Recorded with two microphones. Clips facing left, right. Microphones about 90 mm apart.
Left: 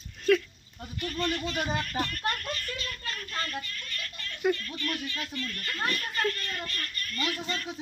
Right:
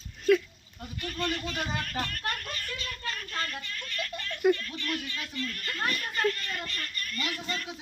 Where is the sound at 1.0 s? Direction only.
15° left (ahead or behind).